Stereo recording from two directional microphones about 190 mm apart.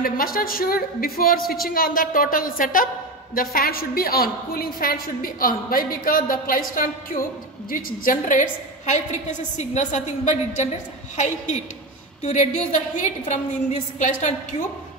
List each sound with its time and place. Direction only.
0.0 s a woman's voice: 50° left (ahead or behind)